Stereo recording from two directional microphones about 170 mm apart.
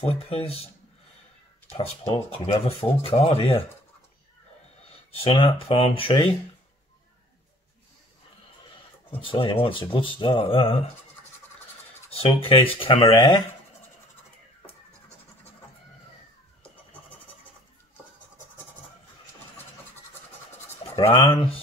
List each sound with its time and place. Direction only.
0.0 s speech: 35° left (ahead or behind)
2.1 s speech: 35° left (ahead or behind)
5.2 s speech: 30° left (ahead or behind)
9.1 s speech: 30° left (ahead or behind)
12.2 s speech: 35° left (ahead or behind)
21.1 s speech: 30° left (ahead or behind)